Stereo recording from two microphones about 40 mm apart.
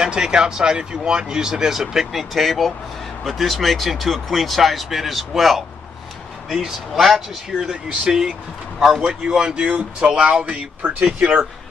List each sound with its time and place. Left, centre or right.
0.0 s speech: centre
7.6 s speech: centre
10.4 s speech: right
11.1 s speech: right